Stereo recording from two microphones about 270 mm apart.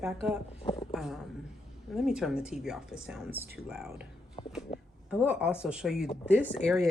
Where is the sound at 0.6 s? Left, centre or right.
Centre.